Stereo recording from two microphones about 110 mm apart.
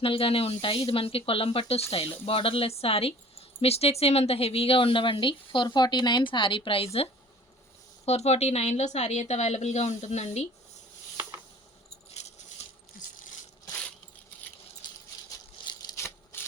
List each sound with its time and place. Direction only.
0.0 s speech: 55° left (ahead or behind)
8.0 s a woman's voice: 75° left (ahead or behind)
12.2 s coin: 85° left
12.6 s coin: 75° left (ahead or behind)
16.0 s a sound: 20° left (ahead or behind)